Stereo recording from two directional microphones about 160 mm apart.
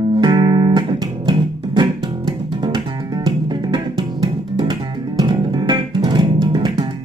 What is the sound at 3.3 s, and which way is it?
Music, 25° right (ahead or behind).